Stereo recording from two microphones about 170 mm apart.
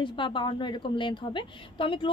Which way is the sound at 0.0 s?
30° left (ahead or behind).